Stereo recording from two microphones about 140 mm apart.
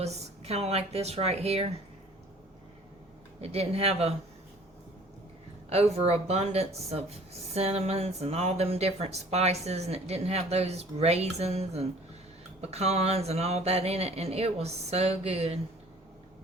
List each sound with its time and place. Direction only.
0.0 s speech: 50° right (ahead or behind)
3.4 s speech: 45° right (ahead or behind)
5.6 s speech: 45° right (ahead or behind)